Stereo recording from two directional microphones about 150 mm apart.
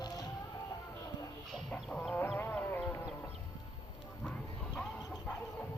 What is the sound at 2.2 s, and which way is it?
Music, 15° left (ahead or behind).